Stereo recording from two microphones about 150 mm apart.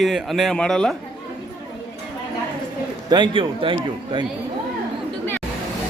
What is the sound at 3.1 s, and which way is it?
A man's voice, 35° right (ahead or behind).